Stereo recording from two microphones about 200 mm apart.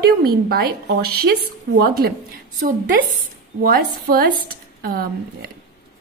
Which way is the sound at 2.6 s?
40° right (ahead or behind).